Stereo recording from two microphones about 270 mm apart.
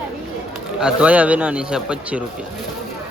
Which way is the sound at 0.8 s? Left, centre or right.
Centre.